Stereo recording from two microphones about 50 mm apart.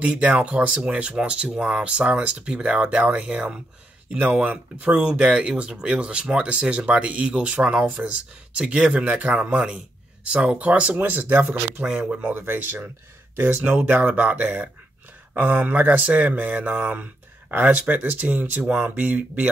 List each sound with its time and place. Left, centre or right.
0.0 s speech: right
4.2 s speech: right
11.9 s speech: centre
12.3 s speech: right
13.6 s speech: right